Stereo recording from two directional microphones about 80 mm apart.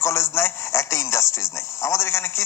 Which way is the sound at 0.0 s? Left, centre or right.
Left.